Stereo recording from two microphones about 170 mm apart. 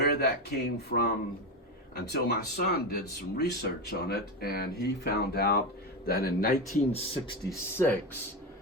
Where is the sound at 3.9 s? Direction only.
65° left (ahead or behind).